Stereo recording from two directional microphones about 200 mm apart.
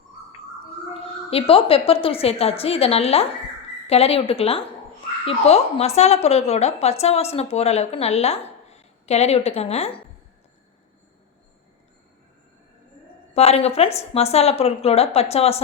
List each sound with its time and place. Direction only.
1.3 s a woman's voice: 30° left (ahead or behind)
13.3 s speech: 30° left (ahead or behind)